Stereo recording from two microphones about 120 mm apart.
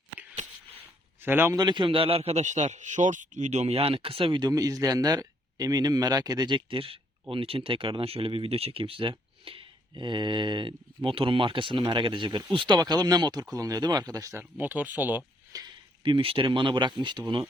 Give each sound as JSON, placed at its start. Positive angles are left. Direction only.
{"t": 1.2, "sound": "speech", "side_deg": -15}
{"t": 1.5, "sound": "a man's voice", "side_deg": -40}
{"t": 14.6, "sound": "speech", "side_deg": -15}
{"t": 15.5, "sound": "speech", "side_deg": -30}
{"t": 16.0, "sound": "a man's voice", "side_deg": -50}